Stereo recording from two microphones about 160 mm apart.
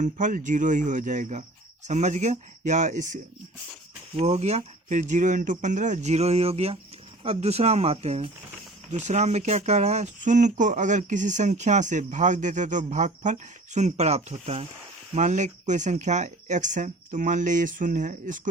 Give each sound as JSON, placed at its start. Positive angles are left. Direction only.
{"t": 0.0, "sound": "speech", "side_deg": -50}